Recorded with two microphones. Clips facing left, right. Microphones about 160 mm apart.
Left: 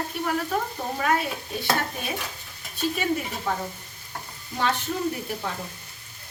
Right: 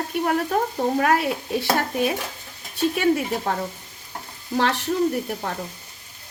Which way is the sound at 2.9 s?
65° right (ahead or behind).